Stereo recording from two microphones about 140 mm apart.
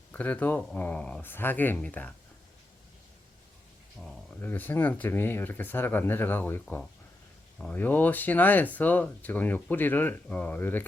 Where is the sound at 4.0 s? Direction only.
5° right (ahead or behind).